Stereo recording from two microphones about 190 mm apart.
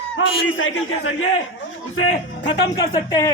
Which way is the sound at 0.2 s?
75° left (ahead or behind).